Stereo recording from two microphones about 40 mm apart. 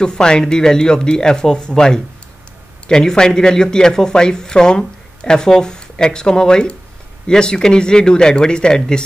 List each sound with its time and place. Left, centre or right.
0.0 s speech: left